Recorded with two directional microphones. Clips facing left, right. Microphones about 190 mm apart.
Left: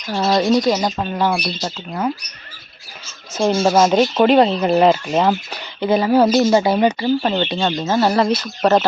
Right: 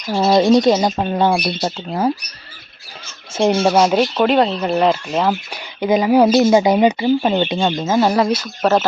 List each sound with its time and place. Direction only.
0.1 s speech: 20° right (ahead or behind)
3.3 s speech: 20° right (ahead or behind)
3.8 s speech: 5° right (ahead or behind)
5.5 s speech: 15° right (ahead or behind)